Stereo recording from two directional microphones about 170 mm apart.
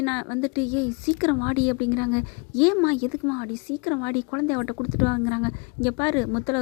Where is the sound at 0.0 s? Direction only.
25° left (ahead or behind).